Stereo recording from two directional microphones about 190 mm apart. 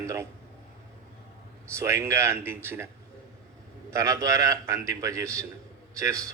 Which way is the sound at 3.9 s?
15° right (ahead or behind).